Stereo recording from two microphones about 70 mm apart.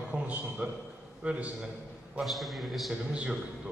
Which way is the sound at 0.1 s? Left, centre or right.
Centre.